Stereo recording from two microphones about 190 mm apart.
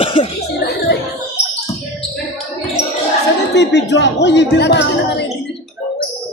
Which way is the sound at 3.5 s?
65° left (ahead or behind).